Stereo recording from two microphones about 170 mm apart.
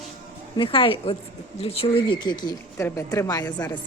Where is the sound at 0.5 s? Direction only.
30° left (ahead or behind).